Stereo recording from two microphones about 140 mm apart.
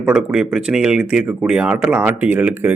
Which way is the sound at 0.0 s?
5° right (ahead or behind).